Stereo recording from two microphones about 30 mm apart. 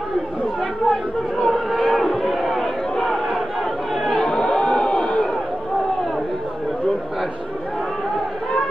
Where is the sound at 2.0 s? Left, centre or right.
Centre.